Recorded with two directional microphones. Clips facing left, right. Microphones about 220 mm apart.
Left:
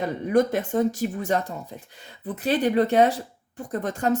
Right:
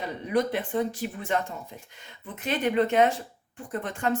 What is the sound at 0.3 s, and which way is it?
Speech, 45° left (ahead or behind).